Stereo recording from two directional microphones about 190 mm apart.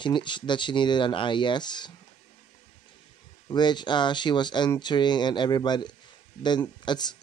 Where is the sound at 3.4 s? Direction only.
25° left (ahead or behind).